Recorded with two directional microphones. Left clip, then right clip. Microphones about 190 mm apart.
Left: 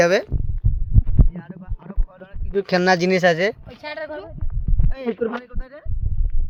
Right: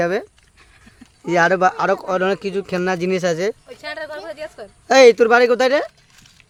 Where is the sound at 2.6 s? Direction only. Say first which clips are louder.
Left 8 dB; 5° right (ahead or behind).